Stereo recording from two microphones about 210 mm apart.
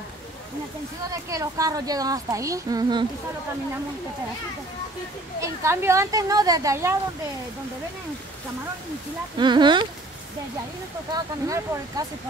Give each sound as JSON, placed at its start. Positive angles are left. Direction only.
{"t": 1.3, "sound": "a woman's voice", "side_deg": -15}
{"t": 5.4, "sound": "a woman's voice", "side_deg": -10}
{"t": 9.4, "sound": "speech", "side_deg": -20}
{"t": 11.1, "sound": "a woman's voice", "side_deg": -15}